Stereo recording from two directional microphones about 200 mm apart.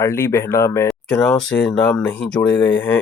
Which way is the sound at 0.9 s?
5° left (ahead or behind).